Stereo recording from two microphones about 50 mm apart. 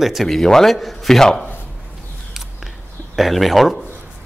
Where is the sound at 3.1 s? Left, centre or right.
Centre.